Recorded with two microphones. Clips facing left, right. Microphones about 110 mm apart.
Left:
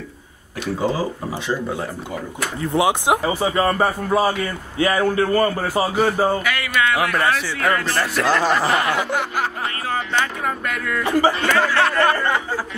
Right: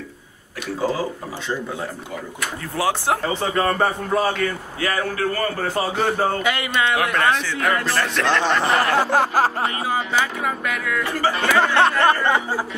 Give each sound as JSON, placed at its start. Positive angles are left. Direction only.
{"t": 0.7, "sound": "a man's voice", "side_deg": 25}
{"t": 1.5, "sound": "speech", "side_deg": 0}
{"t": 2.6, "sound": "a man's voice", "side_deg": 20}
{"t": 4.7, "sound": "a man's voice", "side_deg": 20}
{"t": 5.6, "sound": "a man's voice", "side_deg": 10}
{"t": 6.4, "sound": "speech", "side_deg": -20}
{"t": 7.8, "sound": "speech", "side_deg": 0}
{"t": 8.9, "sound": "snicker", "side_deg": -35}
{"t": 9.8, "sound": "speech", "side_deg": -10}
{"t": 11.1, "sound": "a man's voice", "side_deg": 20}
{"t": 11.6, "sound": "speech", "side_deg": -20}